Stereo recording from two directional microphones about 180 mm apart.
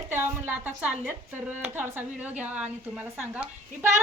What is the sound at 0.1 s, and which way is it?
A woman's voice, 10° right (ahead or behind).